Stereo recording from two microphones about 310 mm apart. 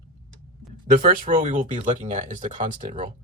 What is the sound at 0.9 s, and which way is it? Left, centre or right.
Speech, right.